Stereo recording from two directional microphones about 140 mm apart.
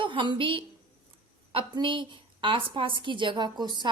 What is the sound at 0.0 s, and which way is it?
A woman's voice, 35° right (ahead or behind).